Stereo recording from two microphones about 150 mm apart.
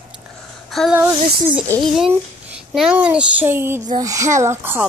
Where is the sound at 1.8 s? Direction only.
Centre (ahead or behind).